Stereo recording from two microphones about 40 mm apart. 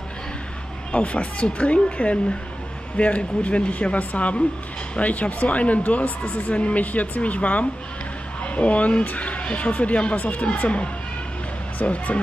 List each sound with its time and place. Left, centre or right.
0.9 s speech: left